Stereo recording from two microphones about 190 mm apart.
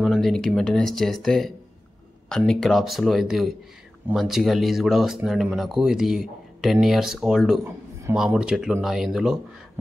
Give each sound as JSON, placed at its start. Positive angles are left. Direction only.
{"t": 0.0, "sound": "a man's voice", "side_deg": 0}